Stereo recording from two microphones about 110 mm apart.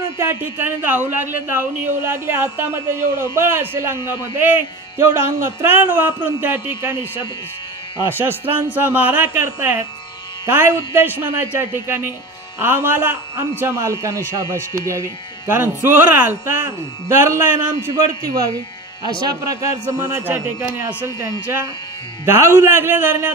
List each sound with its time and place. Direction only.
0.2 s speech: 20° right (ahead or behind)
8.1 s speech: 20° right (ahead or behind)
19.2 s speech: 30° right (ahead or behind)
20.2 s speech: 15° right (ahead or behind)